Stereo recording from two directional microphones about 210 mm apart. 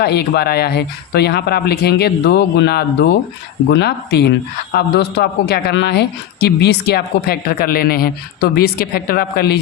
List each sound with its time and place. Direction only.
0.0 s a man's voice: 50° left (ahead or behind)